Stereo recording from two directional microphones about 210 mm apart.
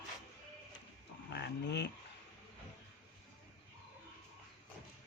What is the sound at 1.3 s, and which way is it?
Livestock, 55° left (ahead or behind).